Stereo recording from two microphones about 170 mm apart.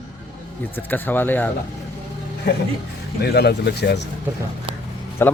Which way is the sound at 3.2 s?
70° left (ahead or behind).